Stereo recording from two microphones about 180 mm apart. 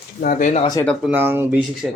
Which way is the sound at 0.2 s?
50° left (ahead or behind).